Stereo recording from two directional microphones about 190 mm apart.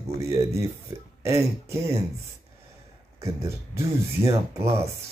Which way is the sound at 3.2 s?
15° right (ahead or behind).